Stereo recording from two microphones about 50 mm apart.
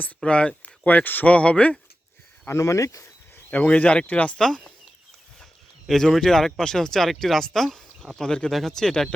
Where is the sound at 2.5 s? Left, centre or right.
Left.